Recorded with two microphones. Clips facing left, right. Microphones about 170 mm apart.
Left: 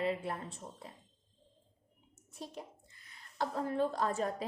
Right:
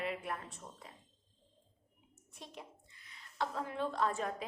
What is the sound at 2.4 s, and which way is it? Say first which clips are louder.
A woman's voice: left 5 dB; 40° left (ahead or behind).